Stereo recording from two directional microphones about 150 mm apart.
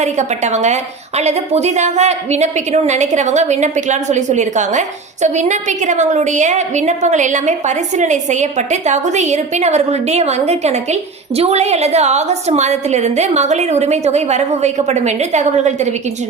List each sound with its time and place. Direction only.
0.0 s a woman's voice: 50° right (ahead or behind)